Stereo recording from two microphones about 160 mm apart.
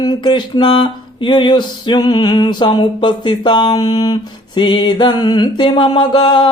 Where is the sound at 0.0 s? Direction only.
25° left (ahead or behind).